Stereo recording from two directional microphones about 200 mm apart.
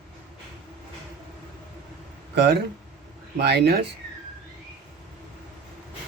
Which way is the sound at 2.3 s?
55° right (ahead or behind).